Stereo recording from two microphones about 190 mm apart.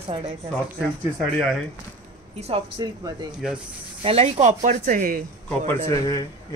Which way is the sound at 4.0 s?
30° right (ahead or behind).